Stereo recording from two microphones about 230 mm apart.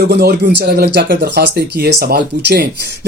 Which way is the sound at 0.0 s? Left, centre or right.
Right.